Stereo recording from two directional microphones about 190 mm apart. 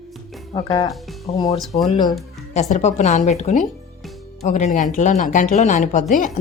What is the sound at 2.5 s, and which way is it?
Speech, 35° left (ahead or behind).